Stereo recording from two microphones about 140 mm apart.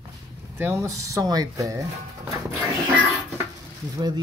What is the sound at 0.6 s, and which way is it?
Speech, 20° right (ahead or behind).